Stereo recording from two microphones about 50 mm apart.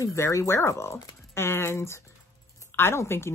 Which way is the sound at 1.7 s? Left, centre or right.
Left.